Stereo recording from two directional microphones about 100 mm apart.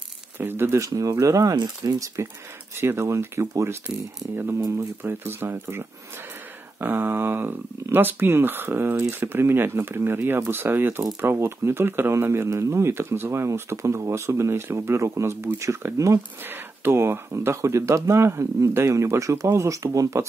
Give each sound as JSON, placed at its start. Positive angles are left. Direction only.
{"t": 0.4, "sound": "speech", "side_deg": -20}